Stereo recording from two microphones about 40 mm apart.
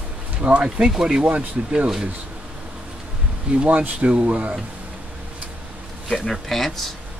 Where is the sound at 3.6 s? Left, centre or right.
Right.